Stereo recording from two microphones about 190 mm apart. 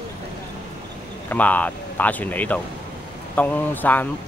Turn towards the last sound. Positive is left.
turn(degrees=10)  # may be behind; listen again after turning